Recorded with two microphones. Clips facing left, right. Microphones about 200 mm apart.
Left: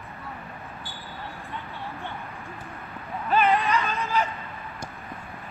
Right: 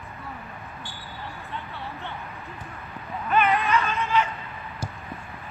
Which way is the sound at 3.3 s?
30° left (ahead or behind).